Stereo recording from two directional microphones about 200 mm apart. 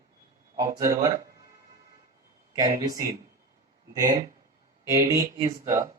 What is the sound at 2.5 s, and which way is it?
Speech, 20° right (ahead or behind).